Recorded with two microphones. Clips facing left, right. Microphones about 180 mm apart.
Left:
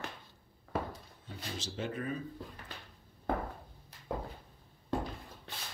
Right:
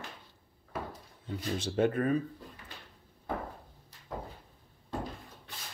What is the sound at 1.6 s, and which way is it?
Speech, 55° right (ahead or behind).